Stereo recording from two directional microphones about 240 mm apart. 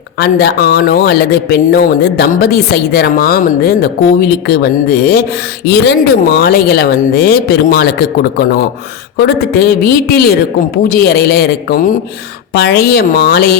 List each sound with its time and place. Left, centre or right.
0.2 s speech: left